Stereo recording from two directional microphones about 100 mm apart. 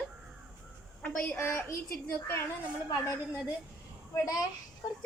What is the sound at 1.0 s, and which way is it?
Speech, 20° left (ahead or behind).